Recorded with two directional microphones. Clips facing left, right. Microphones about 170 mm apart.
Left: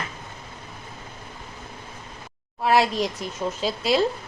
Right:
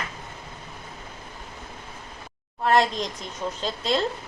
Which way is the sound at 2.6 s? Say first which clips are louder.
Left 1 dB; 5° left (ahead or behind).